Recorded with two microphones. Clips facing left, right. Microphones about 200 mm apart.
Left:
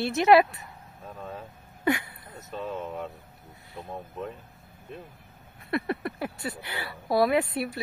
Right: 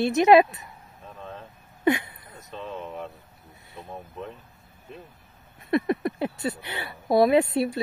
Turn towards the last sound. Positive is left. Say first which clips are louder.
# right 5 dB
turn(degrees=-25)  # may be behind; listen again after turning